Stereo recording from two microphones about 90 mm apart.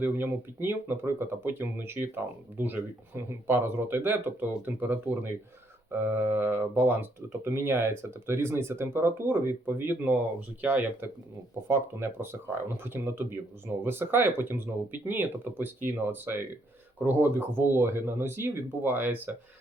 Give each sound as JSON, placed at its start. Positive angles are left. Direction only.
{"t": 0.0, "sound": "speech", "side_deg": -25}